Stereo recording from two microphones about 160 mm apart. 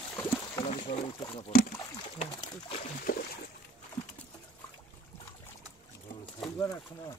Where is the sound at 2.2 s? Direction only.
40° left (ahead or behind).